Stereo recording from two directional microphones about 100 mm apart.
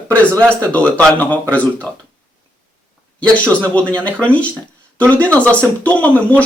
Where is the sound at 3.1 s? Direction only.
10° left (ahead or behind).